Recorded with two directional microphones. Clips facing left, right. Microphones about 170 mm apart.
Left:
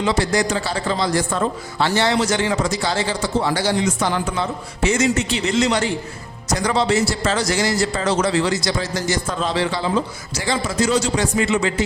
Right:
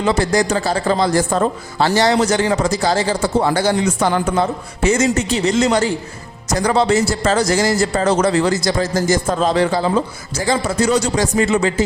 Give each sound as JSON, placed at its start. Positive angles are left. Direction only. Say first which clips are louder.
{"t": 0.0, "sound": "a man's voice", "louder": "right 3 dB", "side_deg": -45}
{"t": 3.2, "sound": "a man's voice", "louder": "right 4 dB", "side_deg": -50}
{"t": 11.2, "sound": "a man's voice", "louder": "right 3 dB", "side_deg": -40}